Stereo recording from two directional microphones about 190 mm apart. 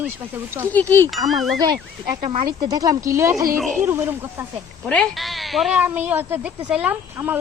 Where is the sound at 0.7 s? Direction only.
10° left (ahead or behind).